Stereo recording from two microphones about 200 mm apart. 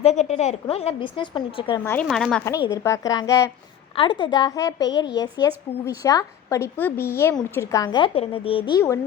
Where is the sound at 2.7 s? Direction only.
15° left (ahead or behind).